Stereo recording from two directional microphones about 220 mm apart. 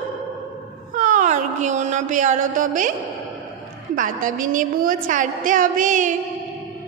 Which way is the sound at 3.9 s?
35° right (ahead or behind).